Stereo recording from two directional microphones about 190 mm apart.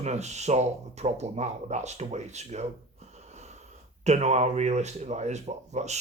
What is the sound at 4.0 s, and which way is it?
Speech, 35° right (ahead or behind).